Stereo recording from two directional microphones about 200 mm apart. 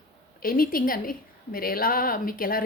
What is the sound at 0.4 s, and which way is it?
Speech, 45° left (ahead or behind).